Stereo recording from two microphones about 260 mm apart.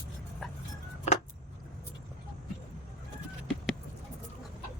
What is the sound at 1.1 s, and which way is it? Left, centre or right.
Vehicle, left.